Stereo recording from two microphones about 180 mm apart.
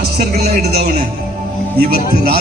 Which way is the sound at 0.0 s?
60° right (ahead or behind).